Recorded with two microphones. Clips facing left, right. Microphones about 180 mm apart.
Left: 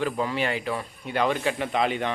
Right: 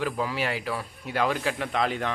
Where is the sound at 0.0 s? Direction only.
5° right (ahead or behind).